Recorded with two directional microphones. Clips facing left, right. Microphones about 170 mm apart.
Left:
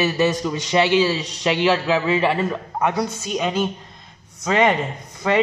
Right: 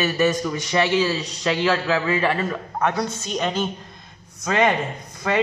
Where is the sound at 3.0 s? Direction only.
5° left (ahead or behind).